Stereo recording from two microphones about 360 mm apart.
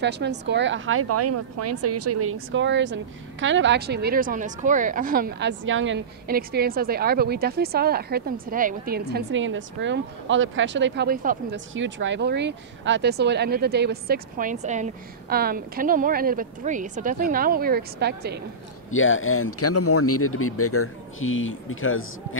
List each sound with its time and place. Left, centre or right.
0.0 s speech: right
18.9 s speech: left